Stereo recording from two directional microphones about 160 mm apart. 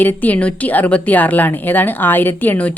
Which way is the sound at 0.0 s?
10° left (ahead or behind).